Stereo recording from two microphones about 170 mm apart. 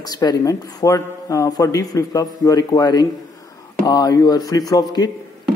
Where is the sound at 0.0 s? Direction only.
20° left (ahead or behind).